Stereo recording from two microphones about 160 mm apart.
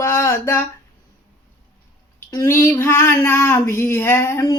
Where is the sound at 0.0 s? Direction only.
15° left (ahead or behind).